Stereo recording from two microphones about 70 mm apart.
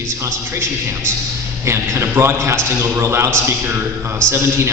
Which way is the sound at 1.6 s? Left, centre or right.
Right.